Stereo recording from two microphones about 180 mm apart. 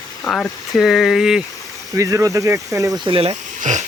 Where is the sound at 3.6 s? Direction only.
40° right (ahead or behind).